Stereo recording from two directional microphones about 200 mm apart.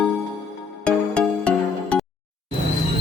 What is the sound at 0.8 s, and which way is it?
Music, 5° left (ahead or behind).